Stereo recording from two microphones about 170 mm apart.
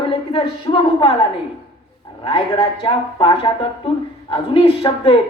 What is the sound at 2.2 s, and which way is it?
A woman's voice, 30° left (ahead or behind).